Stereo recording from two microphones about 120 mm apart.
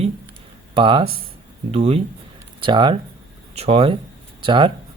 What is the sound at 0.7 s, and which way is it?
Speech, 45° right (ahead or behind).